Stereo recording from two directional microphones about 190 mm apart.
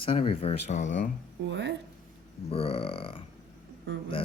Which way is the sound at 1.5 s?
65° right (ahead or behind).